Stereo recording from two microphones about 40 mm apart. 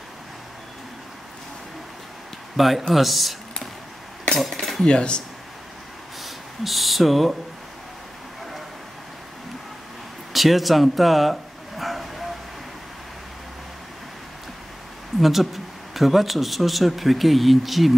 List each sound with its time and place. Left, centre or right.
2.5 s speech: centre
4.6 s cutlery: centre
4.8 s speech: left
6.2 s speech: centre
10.3 s a sound: centre
15.1 s speech: centre